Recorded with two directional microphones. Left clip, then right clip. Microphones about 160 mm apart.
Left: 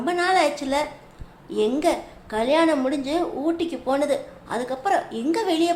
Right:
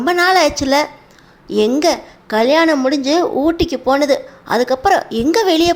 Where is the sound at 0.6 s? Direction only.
40° right (ahead or behind).